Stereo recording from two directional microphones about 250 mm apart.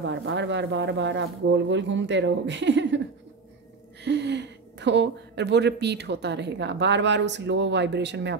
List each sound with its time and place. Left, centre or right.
0.1 s speech: right
4.0 s speech: right